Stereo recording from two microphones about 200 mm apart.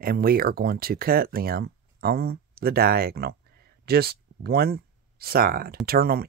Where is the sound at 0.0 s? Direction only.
45° right (ahead or behind).